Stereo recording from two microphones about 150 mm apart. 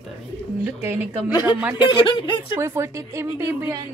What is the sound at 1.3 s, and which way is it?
Speech, 30° left (ahead or behind).